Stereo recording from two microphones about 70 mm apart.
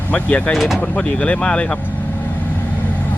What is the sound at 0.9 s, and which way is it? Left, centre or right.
Speech, centre.